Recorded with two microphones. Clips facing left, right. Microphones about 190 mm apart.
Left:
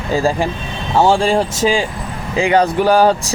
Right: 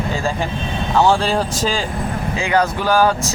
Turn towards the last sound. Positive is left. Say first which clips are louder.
# left 4 dB
turn(degrees=30)  # may be behind; listen again after turning